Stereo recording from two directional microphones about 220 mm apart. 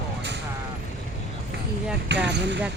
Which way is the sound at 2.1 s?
50° right (ahead or behind).